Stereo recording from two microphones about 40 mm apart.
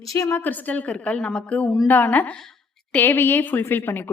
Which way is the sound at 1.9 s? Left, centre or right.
Left.